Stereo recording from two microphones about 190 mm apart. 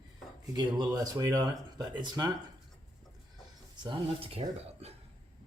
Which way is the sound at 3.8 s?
25° right (ahead or behind).